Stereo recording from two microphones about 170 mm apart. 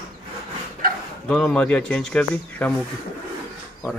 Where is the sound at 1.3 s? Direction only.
5° left (ahead or behind).